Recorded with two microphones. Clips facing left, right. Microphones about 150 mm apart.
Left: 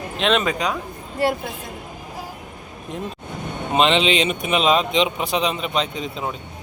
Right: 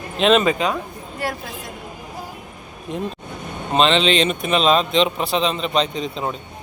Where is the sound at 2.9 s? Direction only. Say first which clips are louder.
Right 4 dB; centre (ahead or behind).